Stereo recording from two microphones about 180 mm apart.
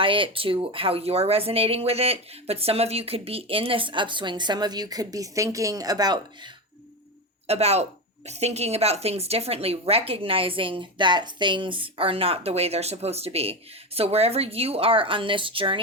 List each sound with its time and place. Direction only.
0.0 s speech: 30° right (ahead or behind)
7.4 s speech: 35° right (ahead or behind)